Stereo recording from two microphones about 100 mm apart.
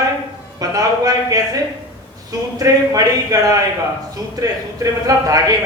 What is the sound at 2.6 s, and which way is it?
A man's voice, 35° right (ahead or behind).